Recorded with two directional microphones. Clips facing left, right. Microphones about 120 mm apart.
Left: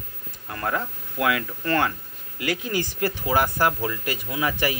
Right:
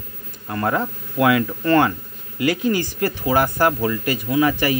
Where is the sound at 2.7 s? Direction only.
15° left (ahead or behind).